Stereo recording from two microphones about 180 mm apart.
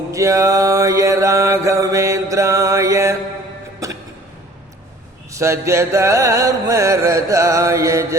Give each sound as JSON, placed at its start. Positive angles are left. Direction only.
{"t": 0.1, "sound": "mantra", "side_deg": -15}
{"t": 3.8, "sound": "music", "side_deg": -15}
{"t": 5.3, "sound": "mantra", "side_deg": -15}